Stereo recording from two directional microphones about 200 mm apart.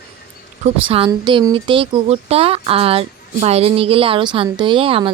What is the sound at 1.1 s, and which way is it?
Speech, 20° right (ahead or behind).